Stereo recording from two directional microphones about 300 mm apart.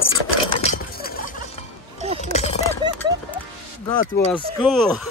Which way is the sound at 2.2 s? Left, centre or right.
Left.